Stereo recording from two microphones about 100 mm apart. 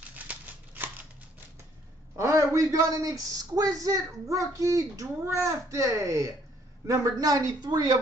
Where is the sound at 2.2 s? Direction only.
30° right (ahead or behind).